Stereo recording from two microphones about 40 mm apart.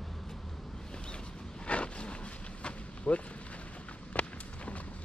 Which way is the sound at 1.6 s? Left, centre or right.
Left.